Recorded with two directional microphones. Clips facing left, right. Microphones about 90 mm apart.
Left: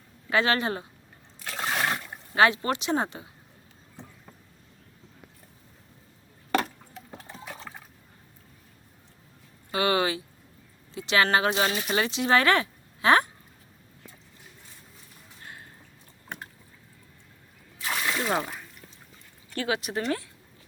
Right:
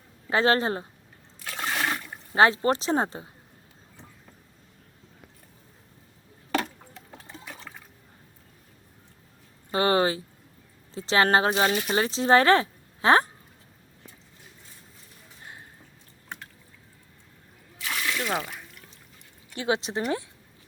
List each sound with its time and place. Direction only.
0.3 s speech: 35° right (ahead or behind)
1.5 s a sound: 5° left (ahead or behind)
2.3 s speech: 30° right (ahead or behind)
9.7 s a sound: 35° right (ahead or behind)
10.9 s speech: 30° right (ahead or behind)
18.1 s water: 25° left (ahead or behind)
19.6 s speech: 25° right (ahead or behind)